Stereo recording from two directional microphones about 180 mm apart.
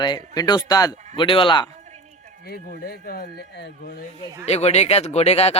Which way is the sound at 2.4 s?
60° left (ahead or behind).